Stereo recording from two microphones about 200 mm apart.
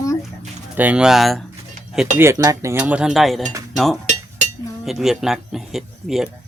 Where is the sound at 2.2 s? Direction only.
15° right (ahead or behind).